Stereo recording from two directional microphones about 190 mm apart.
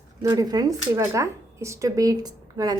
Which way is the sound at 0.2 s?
20° right (ahead or behind).